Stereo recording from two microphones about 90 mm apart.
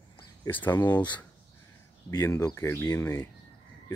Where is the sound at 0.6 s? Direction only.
20° left (ahead or behind).